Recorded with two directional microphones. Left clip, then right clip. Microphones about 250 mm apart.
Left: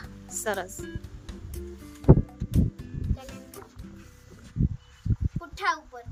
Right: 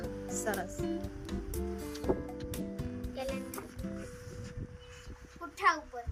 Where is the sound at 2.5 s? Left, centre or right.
Centre.